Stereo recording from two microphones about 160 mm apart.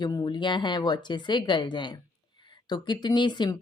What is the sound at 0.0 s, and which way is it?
Speech, 30° left (ahead or behind).